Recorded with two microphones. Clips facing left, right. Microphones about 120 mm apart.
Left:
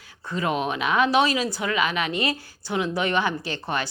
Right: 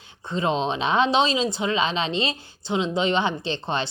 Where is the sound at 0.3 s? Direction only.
25° right (ahead or behind).